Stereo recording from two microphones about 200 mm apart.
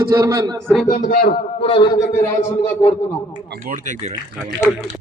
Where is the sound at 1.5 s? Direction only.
25° left (ahead or behind).